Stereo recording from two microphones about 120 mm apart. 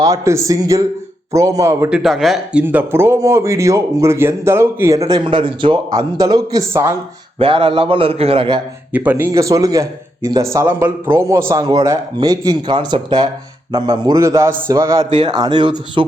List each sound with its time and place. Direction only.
0.0 s speech: 25° right (ahead or behind)
1.9 s speech: centre (ahead or behind); by 4.9 s 20° right (ahead or behind)
5.0 s a man's voice: 40° right (ahead or behind)
5.9 s speech: 30° right (ahead or behind)
7.3 s a man's voice: 45° right (ahead or behind)
8.9 s speech: 15° right (ahead or behind)
15.1 s speech: 40° right (ahead or behind)